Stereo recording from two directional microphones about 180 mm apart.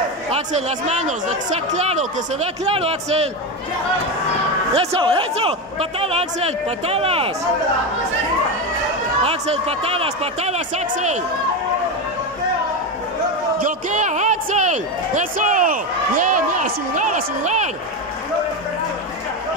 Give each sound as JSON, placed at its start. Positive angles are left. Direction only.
{"t": 0.3, "sound": "speech", "side_deg": -40}
{"t": 4.7, "sound": "speech", "side_deg": -30}
{"t": 9.2, "sound": "speech", "side_deg": -35}
{"t": 13.6, "sound": "a man's voice", "side_deg": -45}